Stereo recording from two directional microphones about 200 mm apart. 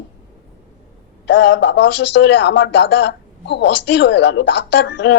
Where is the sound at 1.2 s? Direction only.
60° left (ahead or behind).